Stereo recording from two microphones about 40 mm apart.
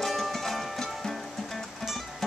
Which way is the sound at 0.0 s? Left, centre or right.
Centre.